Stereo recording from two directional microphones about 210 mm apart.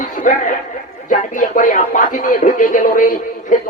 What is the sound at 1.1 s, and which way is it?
A man's voice, 35° left (ahead or behind).